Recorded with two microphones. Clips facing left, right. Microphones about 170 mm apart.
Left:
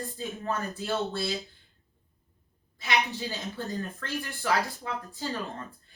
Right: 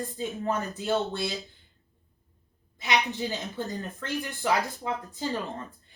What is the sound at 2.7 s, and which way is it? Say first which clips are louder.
A woman's voice: right 2 dB; 20° right (ahead or behind).